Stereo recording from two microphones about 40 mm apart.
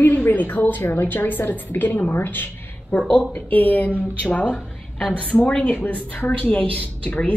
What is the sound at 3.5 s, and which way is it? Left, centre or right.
A woman's voice, left.